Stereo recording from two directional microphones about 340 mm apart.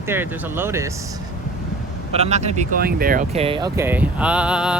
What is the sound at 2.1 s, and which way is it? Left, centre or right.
Speech, centre.